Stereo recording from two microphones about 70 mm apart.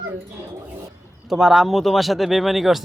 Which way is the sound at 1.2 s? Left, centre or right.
Centre.